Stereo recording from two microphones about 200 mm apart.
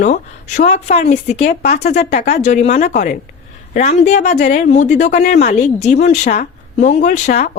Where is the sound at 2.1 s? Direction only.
55° left (ahead or behind).